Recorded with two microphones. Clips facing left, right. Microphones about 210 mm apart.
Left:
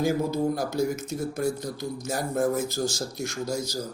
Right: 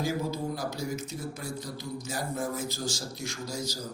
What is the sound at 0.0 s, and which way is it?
A man's voice, 50° left (ahead or behind).